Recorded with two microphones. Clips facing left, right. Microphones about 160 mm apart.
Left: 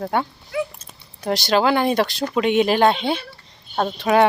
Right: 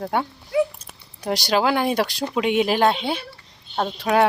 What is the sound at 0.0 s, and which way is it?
Speech, 5° right (ahead or behind).